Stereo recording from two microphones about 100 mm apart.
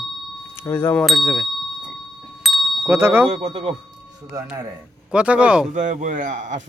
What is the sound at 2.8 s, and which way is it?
Speech, 25° right (ahead or behind).